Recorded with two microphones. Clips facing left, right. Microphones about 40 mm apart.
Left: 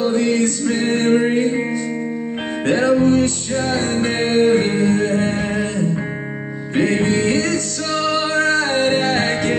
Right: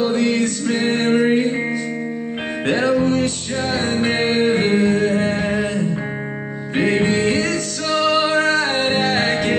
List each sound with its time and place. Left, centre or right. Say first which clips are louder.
0.0 s music: left 1 dB; centre
2.6 s music: left 2 dB; centre